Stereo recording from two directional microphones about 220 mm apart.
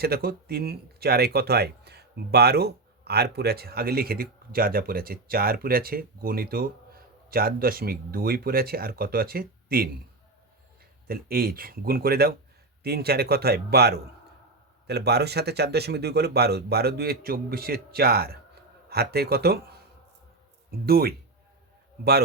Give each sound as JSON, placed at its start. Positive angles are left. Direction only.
{"t": 0.0, "sound": "speech", "side_deg": -45}
{"t": 11.1, "sound": "speech", "side_deg": -45}
{"t": 20.7, "sound": "speech", "side_deg": -45}